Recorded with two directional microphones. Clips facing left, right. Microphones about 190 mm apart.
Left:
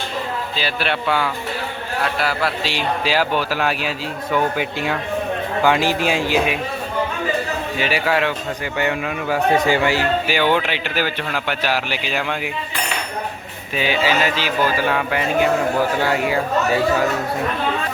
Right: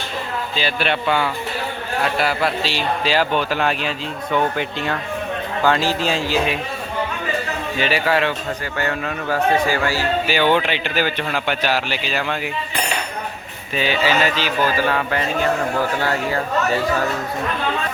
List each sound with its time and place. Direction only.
0.5 s speech: 5° left (ahead or behind)
2.6 s speech: 10° left (ahead or behind)
7.8 s speech: 10° left (ahead or behind)
13.7 s speech: 10° left (ahead or behind)